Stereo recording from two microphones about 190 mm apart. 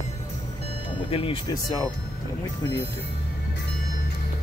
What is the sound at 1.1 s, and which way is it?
Speech, 30° left (ahead or behind).